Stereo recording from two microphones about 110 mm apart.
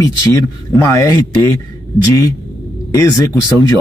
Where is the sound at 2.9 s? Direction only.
30° left (ahead or behind).